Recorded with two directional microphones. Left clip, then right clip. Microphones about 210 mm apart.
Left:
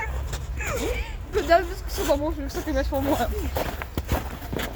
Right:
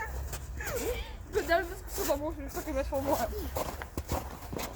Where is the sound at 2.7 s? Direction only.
5° left (ahead or behind).